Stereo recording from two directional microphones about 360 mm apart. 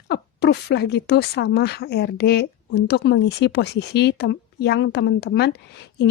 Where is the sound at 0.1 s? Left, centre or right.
Left.